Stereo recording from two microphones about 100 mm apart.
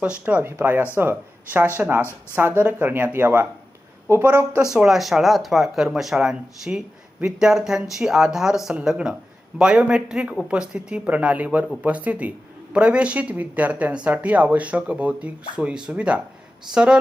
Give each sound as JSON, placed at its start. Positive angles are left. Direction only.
{"t": 0.0, "sound": "speech", "side_deg": -15}
{"t": 4.6, "sound": "speech", "side_deg": -5}